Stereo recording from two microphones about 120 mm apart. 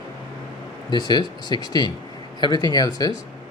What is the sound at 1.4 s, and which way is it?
Speech, 35° left (ahead or behind).